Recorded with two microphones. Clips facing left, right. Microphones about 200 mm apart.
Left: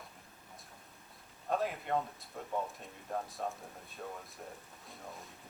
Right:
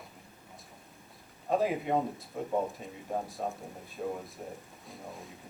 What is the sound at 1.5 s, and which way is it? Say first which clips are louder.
Speech: right 6 dB; centre (ahead or behind).